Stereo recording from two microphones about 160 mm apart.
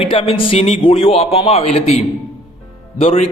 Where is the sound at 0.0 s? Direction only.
35° left (ahead or behind).